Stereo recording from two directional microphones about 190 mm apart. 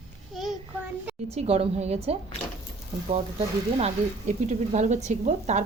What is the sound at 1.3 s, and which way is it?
Speech, 30° right (ahead or behind).